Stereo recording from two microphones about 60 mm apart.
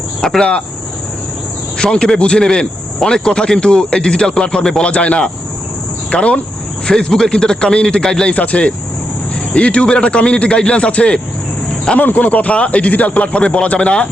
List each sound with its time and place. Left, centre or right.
0.2 s speech: centre
1.8 s a man's voice: centre